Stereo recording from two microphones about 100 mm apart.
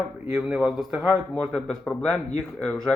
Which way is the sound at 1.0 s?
5° left (ahead or behind).